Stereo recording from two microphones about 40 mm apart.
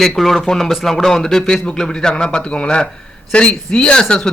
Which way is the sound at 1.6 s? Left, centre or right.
Left.